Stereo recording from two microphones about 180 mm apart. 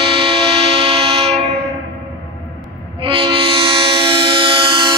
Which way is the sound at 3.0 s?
30° right (ahead or behind).